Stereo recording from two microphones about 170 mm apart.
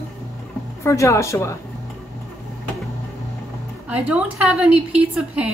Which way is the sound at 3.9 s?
10° right (ahead or behind).